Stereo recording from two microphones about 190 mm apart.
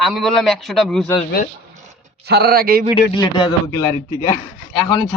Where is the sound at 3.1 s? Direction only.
25° left (ahead or behind).